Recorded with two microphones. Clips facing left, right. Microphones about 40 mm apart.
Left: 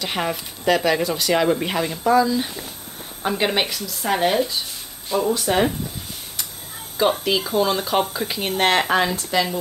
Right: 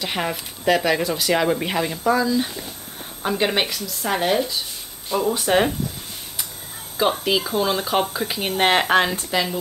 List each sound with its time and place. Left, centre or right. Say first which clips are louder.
0.0 s speech: left 1 dB; centre
5.3 s speech: right 1 dB; right
7.0 s a woman's voice: left 1 dB; centre